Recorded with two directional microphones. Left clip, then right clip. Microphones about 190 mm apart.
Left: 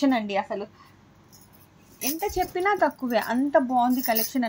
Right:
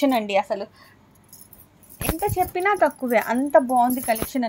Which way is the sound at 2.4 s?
35° right (ahead or behind).